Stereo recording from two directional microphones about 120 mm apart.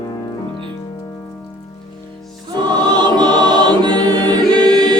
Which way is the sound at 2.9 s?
35° right (ahead or behind).